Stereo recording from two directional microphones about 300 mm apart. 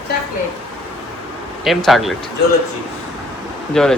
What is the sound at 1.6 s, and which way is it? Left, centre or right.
Speech, centre.